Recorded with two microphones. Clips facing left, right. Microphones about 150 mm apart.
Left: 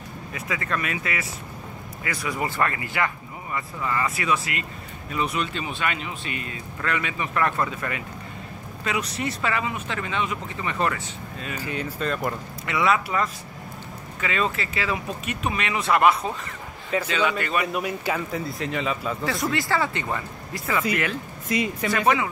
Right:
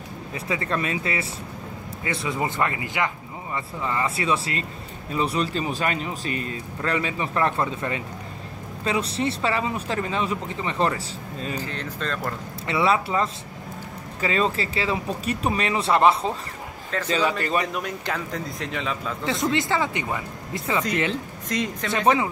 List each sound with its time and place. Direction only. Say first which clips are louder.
0.3 s a man's voice: right 2 dB; 30° right (ahead or behind)
11.5 s speech: left 1 dB; 10° left (ahead or behind)
12.6 s a man's voice: right 1 dB; 30° right (ahead or behind)
17.7 s speech: left 2 dB; 5° left (ahead or behind)
19.5 s speech: right 1 dB; 20° right (ahead or behind)
20.5 s speech: right 1 dB; 25° right (ahead or behind)
21.5 s speech: left 2 dB; 5° left (ahead or behind)
21.9 s a man's voice: right 2 dB; 30° right (ahead or behind)